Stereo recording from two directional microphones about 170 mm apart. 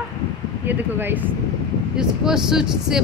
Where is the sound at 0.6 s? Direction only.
10° right (ahead or behind).